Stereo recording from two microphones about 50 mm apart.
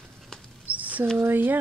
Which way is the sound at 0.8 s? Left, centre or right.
Right.